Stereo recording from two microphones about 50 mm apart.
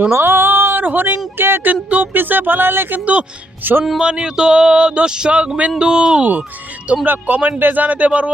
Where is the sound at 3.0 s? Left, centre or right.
Right.